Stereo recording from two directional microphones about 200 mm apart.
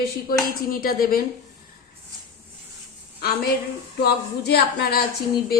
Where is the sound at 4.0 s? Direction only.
55° left (ahead or behind).